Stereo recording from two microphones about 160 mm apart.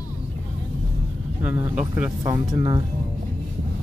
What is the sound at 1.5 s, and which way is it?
Speech, 10° right (ahead or behind).